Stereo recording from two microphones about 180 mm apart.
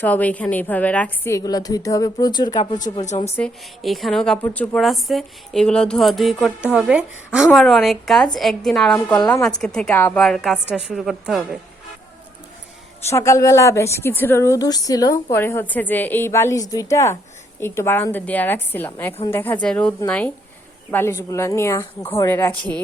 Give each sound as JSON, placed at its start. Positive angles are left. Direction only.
{"t": 0.0, "sound": "a woman's voice", "side_deg": 10}
{"t": 3.0, "sound": "speech", "side_deg": 40}
{"t": 3.2, "sound": "a woman's voice", "side_deg": 5}
{"t": 9.1, "sound": "a woman's voice", "side_deg": 20}
{"t": 9.6, "sound": "a woman's voice", "side_deg": 5}
{"t": 13.1, "sound": "a woman's voice", "side_deg": 15}